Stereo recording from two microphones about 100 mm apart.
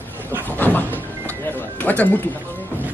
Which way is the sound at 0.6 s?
20° left (ahead or behind).